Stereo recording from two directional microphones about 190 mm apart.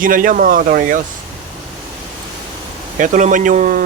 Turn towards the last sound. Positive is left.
turn(degrees=-40)  # may be behind; listen again after turning